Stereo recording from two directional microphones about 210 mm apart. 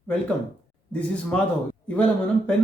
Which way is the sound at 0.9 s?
5° left (ahead or behind).